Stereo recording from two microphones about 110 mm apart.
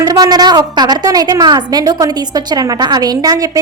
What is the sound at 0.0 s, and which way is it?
A woman's voice, 35° right (ahead or behind).